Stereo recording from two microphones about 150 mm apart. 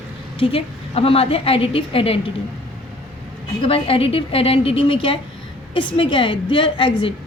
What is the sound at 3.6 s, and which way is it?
A woman's voice, 40° left (ahead or behind).